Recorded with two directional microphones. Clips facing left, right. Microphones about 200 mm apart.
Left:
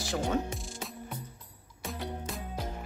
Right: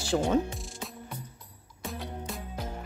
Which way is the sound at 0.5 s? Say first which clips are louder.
Left 1 dB; centre (ahead or behind).